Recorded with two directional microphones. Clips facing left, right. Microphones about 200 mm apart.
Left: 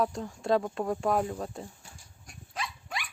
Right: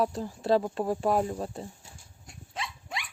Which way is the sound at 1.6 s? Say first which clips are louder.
Right 2 dB; 25° right (ahead or behind).